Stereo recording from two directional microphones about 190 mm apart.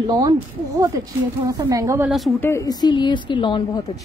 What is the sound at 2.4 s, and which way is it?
A woman's voice, 15° left (ahead or behind).